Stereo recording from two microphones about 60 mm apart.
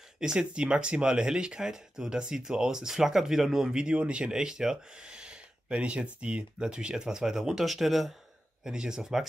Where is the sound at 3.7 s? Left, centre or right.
Centre.